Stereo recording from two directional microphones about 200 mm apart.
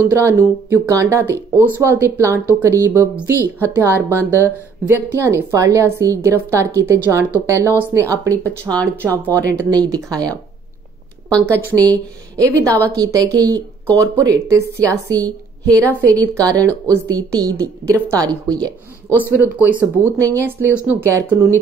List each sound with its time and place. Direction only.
0.2 s speech: 15° right (ahead or behind)
8.6 s speech: 5° left (ahead or behind)
9.5 s speech: 15° right (ahead or behind)
11.4 s speech: 15° right (ahead or behind)
19.4 s speech: 5° right (ahead or behind)